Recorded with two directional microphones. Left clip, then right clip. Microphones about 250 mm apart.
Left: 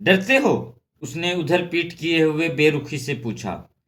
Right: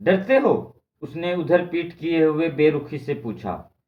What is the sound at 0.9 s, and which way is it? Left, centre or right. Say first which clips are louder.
Speech: left 1 dB; left.